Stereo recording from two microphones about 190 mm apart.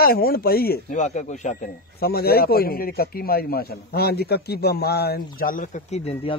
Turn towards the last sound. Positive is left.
turn(degrees=35)  # may be behind; listen again after turning